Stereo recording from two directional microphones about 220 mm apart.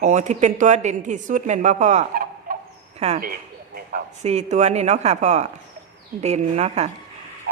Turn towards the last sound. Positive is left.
turn(degrees=-30)  # may be behind; listen again after turning